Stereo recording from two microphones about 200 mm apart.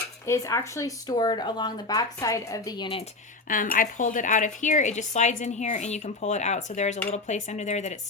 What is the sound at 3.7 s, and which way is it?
A woman's voice, 40° left (ahead or behind).